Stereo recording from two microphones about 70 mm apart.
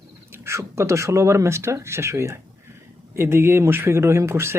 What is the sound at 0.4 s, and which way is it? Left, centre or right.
Speech, right.